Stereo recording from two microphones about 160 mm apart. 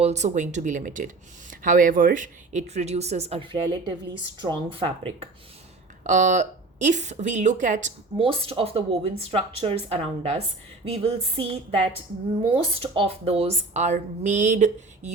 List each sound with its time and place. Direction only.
0.0 s speech: 45° right (ahead or behind)
6.0 s speech: 50° right (ahead or behind)
8.2 s speech: 35° right (ahead or behind)